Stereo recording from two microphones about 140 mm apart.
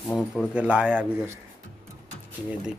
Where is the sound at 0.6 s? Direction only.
10° right (ahead or behind).